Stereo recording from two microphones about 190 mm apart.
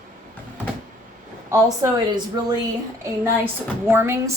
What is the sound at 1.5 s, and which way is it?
A woman's voice, 15° right (ahead or behind).